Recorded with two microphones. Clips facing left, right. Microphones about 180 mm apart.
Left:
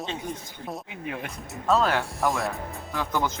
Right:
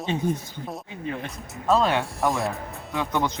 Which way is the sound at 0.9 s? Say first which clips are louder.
Right 2 dB; 10° left (ahead or behind).